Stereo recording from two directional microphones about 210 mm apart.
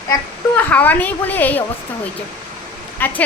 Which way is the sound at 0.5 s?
5° left (ahead or behind).